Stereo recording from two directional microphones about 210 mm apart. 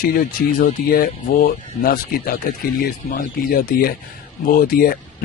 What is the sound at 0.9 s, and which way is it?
Speech, 45° left (ahead or behind).